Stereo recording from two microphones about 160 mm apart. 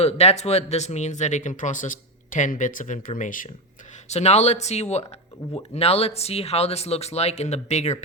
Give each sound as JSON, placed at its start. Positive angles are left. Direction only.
{"t": 0.0, "sound": "speech", "side_deg": 40}
{"t": 4.1, "sound": "speech", "side_deg": 45}